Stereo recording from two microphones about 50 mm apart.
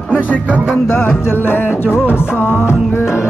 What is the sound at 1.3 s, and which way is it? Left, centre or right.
Music, left.